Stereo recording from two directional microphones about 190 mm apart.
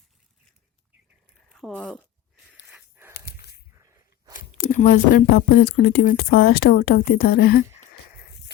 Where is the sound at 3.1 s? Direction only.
55° left (ahead or behind).